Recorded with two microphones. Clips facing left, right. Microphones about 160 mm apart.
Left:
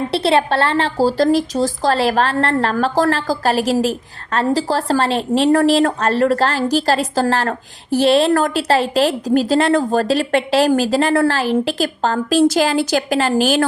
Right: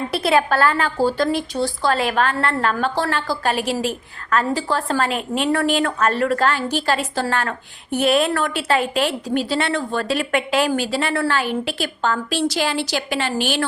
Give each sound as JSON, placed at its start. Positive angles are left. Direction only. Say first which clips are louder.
{"t": 0.1, "sound": "a woman's voice", "louder": "left 2 dB", "side_deg": 30}